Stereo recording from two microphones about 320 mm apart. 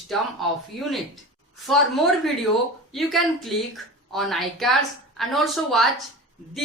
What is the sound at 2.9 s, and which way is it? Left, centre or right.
A woman's voice, centre.